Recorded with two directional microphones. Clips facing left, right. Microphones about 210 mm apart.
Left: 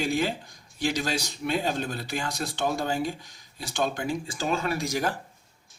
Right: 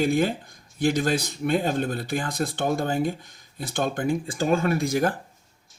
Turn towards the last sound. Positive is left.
turn(degrees=-55)  # may be behind; listen again after turning